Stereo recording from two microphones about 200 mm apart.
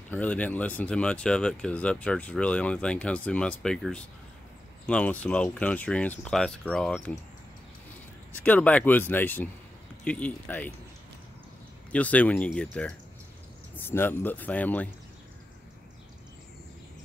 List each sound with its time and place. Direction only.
0.1 s speech: 5° left (ahead or behind)
8.3 s speech: 10° left (ahead or behind)
11.9 s speech: 5° left (ahead or behind)
13.7 s speech: 10° left (ahead or behind)